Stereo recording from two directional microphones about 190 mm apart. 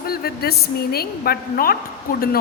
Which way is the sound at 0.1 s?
55° left (ahead or behind).